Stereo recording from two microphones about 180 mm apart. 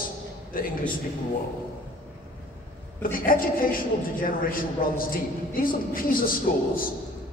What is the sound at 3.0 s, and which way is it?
A woman's voice, 50° left (ahead or behind).